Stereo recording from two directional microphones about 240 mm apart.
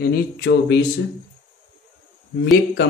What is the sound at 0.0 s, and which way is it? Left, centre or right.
Speech, left.